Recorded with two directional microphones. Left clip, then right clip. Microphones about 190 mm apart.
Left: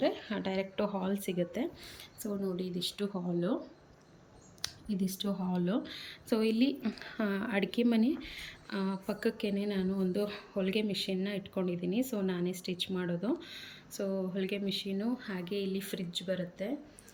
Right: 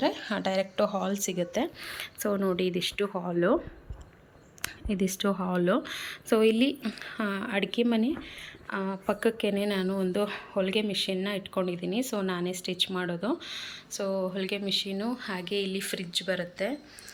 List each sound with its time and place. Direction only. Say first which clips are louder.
0.0 s speech: right 4 dB; 5° left (ahead or behind)
2.2 s speech: right 9 dB; 30° right (ahead or behind)
4.9 s speech: right 9 dB; 30° right (ahead or behind)
5.5 s speech: right 8 dB; 5° left (ahead or behind)